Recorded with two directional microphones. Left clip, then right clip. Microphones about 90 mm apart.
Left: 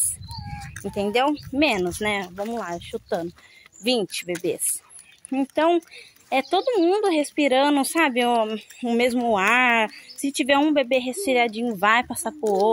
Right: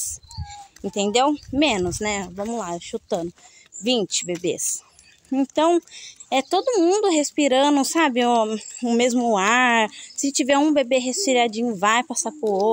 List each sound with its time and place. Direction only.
0.8 s speech: 40° right (ahead or behind)
1.5 s speech: 30° right (ahead or behind)
1.9 s speech: 20° right (ahead or behind)
2.5 s speech: 35° right (ahead or behind)
5.3 s speech: 45° right (ahead or behind)
5.9 s a woman's voice: 30° right (ahead or behind)
6.8 s speech: 40° right (ahead or behind)
9.8 s speech: 50° right (ahead or behind)
11.8 s speech: 25° right (ahead or behind)